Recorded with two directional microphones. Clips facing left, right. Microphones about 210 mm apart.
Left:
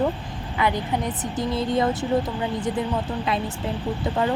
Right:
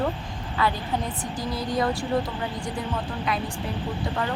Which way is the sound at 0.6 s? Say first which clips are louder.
Left 2 dB; 20° left (ahead or behind).